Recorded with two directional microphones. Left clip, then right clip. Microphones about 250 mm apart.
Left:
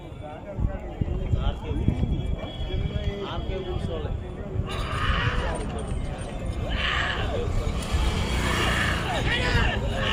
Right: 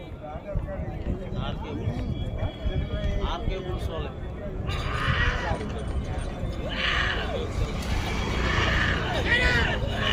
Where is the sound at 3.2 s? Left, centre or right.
Right.